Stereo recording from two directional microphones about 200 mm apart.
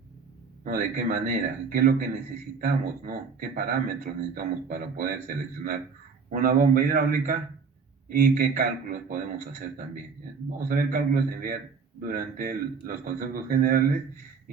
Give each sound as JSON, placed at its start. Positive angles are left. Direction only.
{"t": 0.6, "sound": "a man's voice", "side_deg": -45}